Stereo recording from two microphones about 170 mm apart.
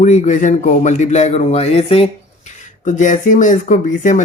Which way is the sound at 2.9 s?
50° left (ahead or behind).